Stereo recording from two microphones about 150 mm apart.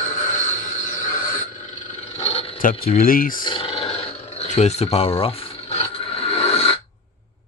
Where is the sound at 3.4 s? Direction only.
35° left (ahead or behind).